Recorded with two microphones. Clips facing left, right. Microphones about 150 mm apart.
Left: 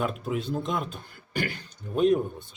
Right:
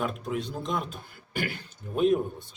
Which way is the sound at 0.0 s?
Centre (ahead or behind).